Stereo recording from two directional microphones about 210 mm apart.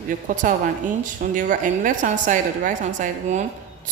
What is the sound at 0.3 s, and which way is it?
Speech, 40° right (ahead or behind).